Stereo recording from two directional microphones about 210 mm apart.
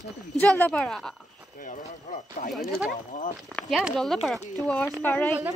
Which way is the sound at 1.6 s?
35° left (ahead or behind).